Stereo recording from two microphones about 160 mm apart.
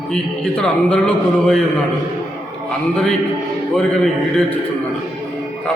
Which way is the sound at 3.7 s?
5° left (ahead or behind).